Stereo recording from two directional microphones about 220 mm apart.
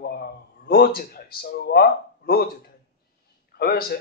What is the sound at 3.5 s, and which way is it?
Speech, 40° left (ahead or behind).